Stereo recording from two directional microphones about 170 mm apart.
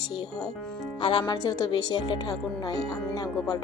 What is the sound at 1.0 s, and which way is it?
A woman's voice, 25° left (ahead or behind).